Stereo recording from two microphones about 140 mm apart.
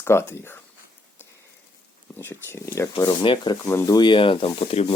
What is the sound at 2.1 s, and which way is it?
Speech, 15° left (ahead or behind).